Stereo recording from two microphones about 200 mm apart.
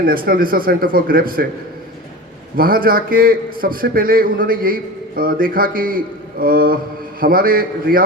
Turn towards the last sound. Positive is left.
turn(degrees=-45)  # may be behind; listen again after turning